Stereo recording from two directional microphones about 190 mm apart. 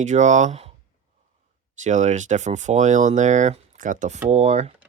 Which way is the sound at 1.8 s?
40° right (ahead or behind).